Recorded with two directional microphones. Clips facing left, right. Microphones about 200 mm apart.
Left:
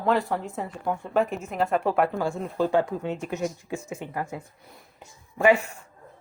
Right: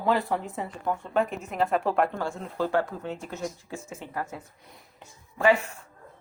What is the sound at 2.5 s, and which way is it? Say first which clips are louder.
Speech: left 3 dB; 15° left (ahead or behind).